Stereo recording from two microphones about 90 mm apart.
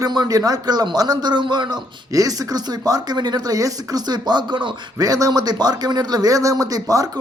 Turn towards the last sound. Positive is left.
turn(degrees=-40)  # may be behind; listen again after turning